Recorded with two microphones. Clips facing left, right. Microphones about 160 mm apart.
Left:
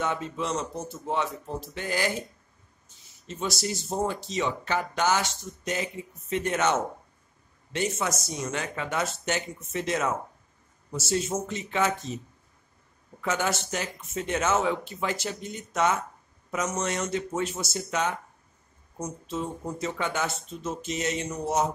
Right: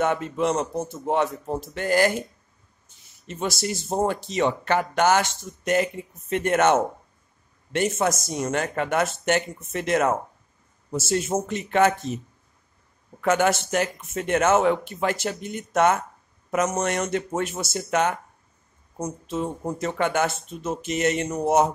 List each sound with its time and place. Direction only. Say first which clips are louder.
0.0 s speech: right 7 dB; 55° right (ahead or behind)
3.3 s speech: right 3 dB; 60° right (ahead or behind)
13.2 s speech: right 7 dB; 55° right (ahead or behind)